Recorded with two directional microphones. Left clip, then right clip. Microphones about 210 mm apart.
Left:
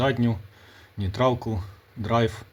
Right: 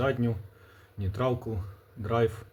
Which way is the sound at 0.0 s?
40° left (ahead or behind).